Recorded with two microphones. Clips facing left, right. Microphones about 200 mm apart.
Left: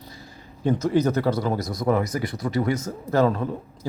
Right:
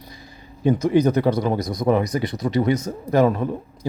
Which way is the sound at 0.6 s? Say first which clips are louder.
Right 4 dB; 15° right (ahead or behind).